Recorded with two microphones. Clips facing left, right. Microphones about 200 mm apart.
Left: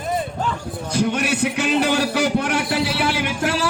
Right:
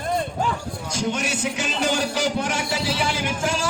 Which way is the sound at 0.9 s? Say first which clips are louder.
Left 5 dB; 60° left (ahead or behind).